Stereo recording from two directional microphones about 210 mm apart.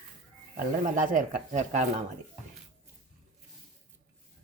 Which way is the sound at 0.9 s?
40° right (ahead or behind).